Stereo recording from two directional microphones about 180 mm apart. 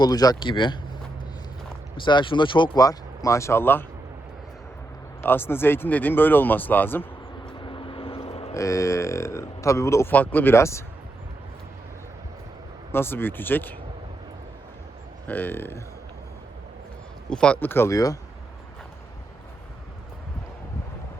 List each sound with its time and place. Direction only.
0.0 s speech: 20° left (ahead or behind)
2.0 s speech: 25° left (ahead or behind)
5.2 s speech: 10° left (ahead or behind)
7.4 s vehicle: 25° left (ahead or behind)
8.5 s speech: 15° left (ahead or behind)
12.9 s speech: 10° left (ahead or behind)
15.3 s speech: 10° left (ahead or behind)
17.2 s speech: 5° left (ahead or behind)